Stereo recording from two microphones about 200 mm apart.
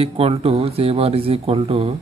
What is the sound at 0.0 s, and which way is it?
Speech, 30° right (ahead or behind).